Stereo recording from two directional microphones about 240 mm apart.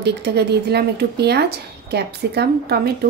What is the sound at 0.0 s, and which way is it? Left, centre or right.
A woman's voice, right.